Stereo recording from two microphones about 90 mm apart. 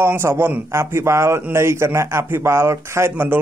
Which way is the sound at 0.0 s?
30° right (ahead or behind).